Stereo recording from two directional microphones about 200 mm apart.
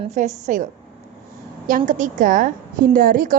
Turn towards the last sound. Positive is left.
turn(degrees=-45)  # may be behind; listen again after turning